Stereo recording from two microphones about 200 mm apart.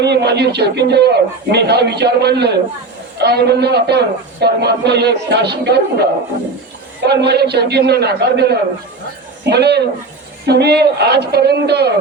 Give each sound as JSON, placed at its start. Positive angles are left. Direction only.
{"t": 0.0, "sound": "a man's voice", "side_deg": -55}